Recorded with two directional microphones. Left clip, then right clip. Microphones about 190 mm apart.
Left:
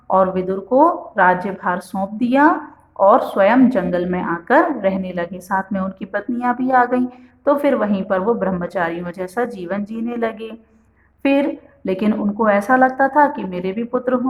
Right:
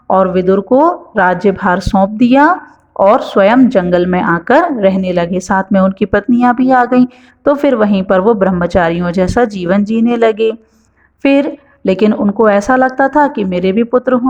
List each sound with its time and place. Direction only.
0.1 s a woman's voice: 35° right (ahead or behind)